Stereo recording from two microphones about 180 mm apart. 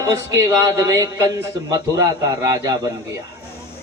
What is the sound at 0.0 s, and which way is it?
A man's voice, 20° right (ahead or behind).